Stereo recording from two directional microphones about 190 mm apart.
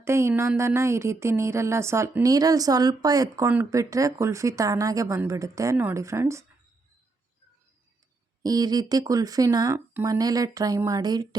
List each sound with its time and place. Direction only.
0.0 s speech: 15° right (ahead or behind)
8.4 s speech: 20° right (ahead or behind)